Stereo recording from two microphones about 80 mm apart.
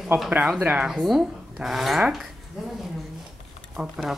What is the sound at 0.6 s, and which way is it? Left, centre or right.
Speech, centre.